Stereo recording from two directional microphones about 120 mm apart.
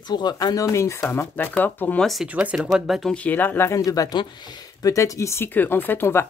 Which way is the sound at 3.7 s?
30° left (ahead or behind).